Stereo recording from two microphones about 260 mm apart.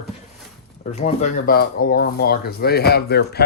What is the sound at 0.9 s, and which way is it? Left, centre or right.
Speech, left.